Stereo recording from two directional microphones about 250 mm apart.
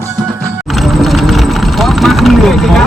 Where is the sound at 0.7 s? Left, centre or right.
Centre.